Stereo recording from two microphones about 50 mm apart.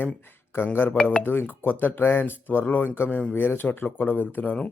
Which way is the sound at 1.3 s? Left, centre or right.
Left.